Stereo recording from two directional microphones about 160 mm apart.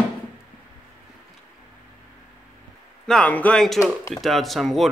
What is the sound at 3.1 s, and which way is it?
Speech, 5° left (ahead or behind).